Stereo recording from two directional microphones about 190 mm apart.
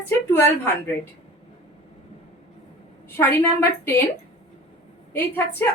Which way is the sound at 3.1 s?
10° left (ahead or behind).